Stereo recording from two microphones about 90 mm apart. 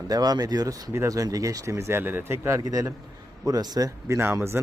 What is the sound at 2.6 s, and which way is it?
Speech, 45° right (ahead or behind).